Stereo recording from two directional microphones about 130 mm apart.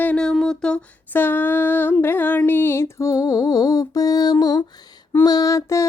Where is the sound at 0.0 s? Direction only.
10° left (ahead or behind).